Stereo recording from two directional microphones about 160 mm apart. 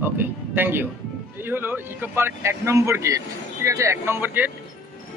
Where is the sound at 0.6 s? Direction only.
15° right (ahead or behind).